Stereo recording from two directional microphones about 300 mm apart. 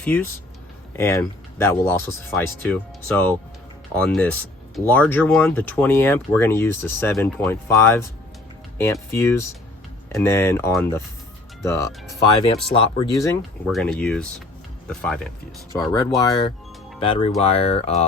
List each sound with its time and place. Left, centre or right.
0.0 s speech: centre
3.9 s speech: centre
13.7 s speech: centre
15.7 s speech: centre